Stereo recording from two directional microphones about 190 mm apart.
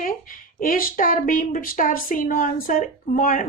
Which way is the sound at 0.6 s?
45° left (ahead or behind).